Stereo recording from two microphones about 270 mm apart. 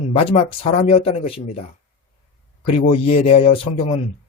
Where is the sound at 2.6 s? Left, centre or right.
Left.